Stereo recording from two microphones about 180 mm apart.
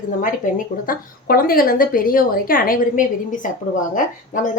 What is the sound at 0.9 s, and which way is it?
A woman's voice, 55° left (ahead or behind).